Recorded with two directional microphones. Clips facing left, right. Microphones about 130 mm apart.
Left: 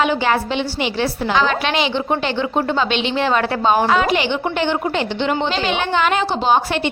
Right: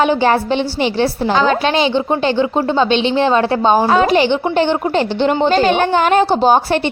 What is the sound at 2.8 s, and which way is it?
Speech, 30° right (ahead or behind).